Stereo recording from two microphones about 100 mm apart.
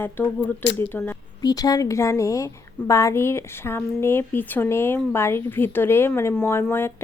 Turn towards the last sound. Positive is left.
turn(degrees=25)  # may be behind; listen again after turning